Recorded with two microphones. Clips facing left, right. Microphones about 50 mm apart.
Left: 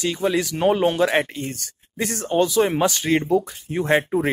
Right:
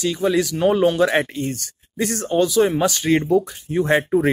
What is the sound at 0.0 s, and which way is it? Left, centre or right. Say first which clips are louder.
Speech: right 2 dB; centre.